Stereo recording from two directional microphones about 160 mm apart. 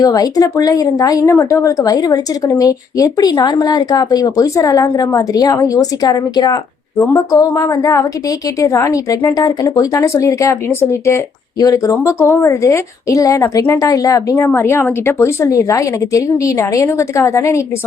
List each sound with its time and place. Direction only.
0.0 s a woman's voice: 25° left (ahead or behind)